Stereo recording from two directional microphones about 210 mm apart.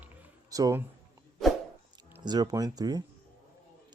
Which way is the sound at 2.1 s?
20° right (ahead or behind).